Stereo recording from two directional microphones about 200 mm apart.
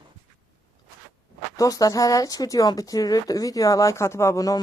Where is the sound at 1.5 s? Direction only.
15° left (ahead or behind).